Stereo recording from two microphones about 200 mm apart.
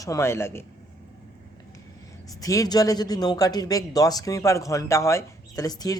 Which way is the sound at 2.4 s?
15° left (ahead or behind).